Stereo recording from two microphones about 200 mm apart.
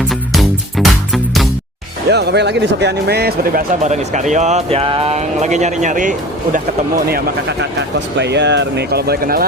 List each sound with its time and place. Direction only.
0.1 s music: centre (ahead or behind)
2.0 s speech: 55° right (ahead or behind)
3.8 s speech: 35° right (ahead or behind)
7.6 s speech: 60° right (ahead or behind)